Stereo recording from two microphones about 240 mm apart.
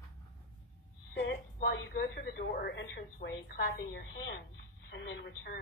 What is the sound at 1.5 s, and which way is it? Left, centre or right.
Speech, left.